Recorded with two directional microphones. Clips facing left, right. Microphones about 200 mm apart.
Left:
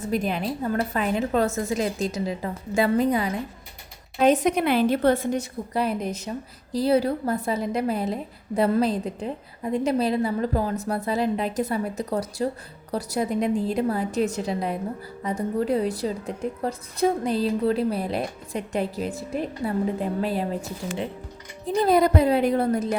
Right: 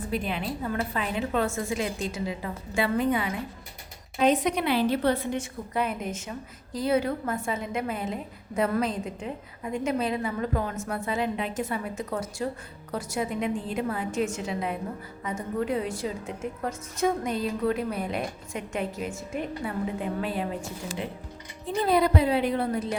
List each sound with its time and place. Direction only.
0.0 s a woman's voice: 45° left (ahead or behind)
21.8 s a woman's voice: 45° left (ahead or behind)